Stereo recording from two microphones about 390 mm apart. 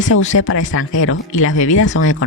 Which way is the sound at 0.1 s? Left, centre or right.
Left.